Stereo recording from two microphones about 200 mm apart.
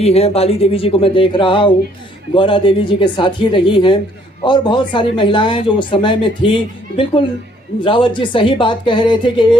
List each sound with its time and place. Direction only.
0.0 s speech: 30° left (ahead or behind)